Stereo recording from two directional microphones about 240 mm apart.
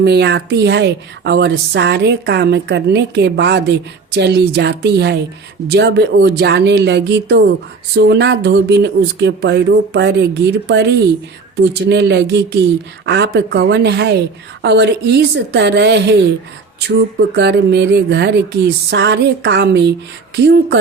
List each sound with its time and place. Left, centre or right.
0.0 s a woman's voice: right